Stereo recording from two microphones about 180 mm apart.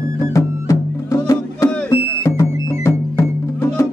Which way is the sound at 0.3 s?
15° left (ahead or behind).